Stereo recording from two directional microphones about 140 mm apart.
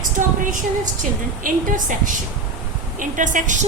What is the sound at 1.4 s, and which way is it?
A woman's voice, 70° right (ahead or behind).